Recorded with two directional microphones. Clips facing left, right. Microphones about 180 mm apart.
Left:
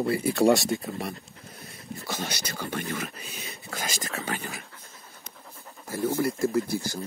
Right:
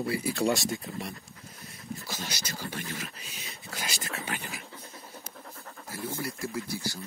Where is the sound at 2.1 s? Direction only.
60° left (ahead or behind).